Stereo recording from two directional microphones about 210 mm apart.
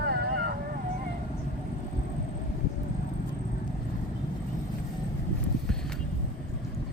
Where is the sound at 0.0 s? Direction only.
50° right (ahead or behind).